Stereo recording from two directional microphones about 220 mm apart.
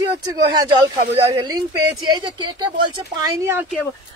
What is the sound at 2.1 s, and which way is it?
Speech, 20° right (ahead or behind).